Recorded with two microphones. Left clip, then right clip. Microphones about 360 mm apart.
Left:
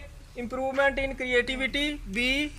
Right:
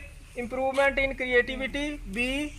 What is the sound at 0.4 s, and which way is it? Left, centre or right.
A woman's voice, centre.